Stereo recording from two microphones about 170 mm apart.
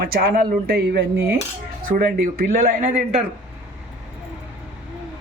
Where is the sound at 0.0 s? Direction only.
65° right (ahead or behind); by 3.2 s 40° right (ahead or behind).